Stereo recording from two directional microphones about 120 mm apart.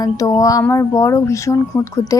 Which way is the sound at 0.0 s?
30° left (ahead or behind).